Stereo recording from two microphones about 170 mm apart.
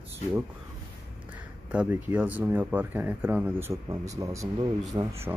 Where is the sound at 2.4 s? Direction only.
10° right (ahead or behind).